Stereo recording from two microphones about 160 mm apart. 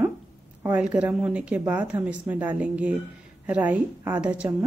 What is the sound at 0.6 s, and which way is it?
A woman's voice, 10° right (ahead or behind).